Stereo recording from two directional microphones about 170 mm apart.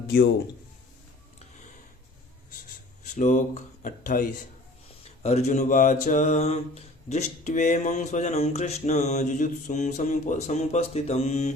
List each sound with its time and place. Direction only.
3.0 s speech: 45° left (ahead or behind)
5.2 s mantra: 40° left (ahead or behind)